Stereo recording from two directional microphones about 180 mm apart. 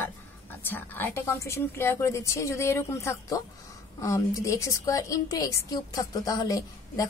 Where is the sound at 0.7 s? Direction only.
10° left (ahead or behind).